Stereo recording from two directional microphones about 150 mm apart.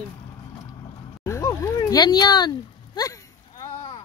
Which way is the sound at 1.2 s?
20° left (ahead or behind).